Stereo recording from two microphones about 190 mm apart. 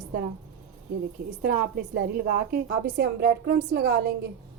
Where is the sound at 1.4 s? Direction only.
55° right (ahead or behind).